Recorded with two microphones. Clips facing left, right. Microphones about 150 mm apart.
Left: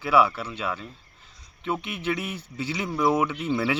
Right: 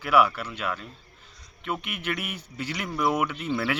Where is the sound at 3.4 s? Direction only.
10° left (ahead or behind).